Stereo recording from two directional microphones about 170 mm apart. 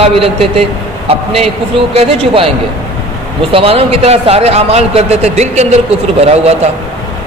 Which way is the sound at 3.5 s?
35° right (ahead or behind).